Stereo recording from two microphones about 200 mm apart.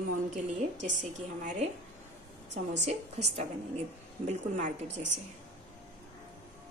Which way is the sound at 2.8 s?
35° right (ahead or behind).